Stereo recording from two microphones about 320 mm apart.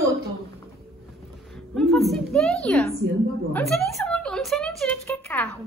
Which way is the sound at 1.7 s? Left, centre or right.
Centre.